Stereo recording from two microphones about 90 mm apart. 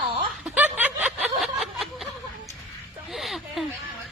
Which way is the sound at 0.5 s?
20° right (ahead or behind).